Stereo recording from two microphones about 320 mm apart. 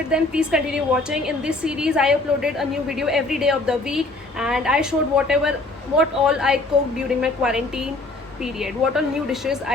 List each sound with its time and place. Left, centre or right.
0.1 s a woman's voice: centre